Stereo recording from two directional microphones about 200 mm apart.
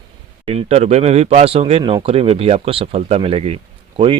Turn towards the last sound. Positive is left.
turn(degrees=-25)  # may be behind; listen again after turning